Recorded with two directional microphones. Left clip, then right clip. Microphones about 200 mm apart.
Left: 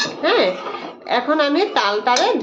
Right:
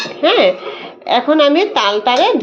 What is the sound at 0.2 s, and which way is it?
Speech, 20° right (ahead or behind).